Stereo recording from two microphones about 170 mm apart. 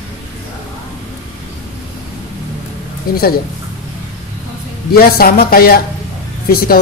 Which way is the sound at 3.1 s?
60° left (ahead or behind).